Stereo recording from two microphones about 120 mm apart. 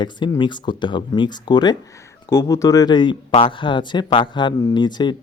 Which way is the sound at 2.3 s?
25° left (ahead or behind).